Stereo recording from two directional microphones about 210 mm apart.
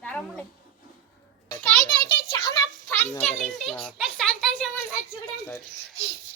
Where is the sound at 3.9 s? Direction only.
5° left (ahead or behind).